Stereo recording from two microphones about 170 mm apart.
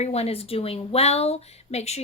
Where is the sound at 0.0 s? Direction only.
40° left (ahead or behind).